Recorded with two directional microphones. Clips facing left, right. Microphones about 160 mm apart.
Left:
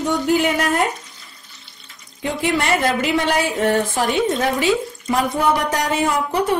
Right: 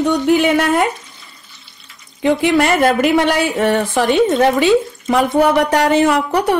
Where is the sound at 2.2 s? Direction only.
65° right (ahead or behind).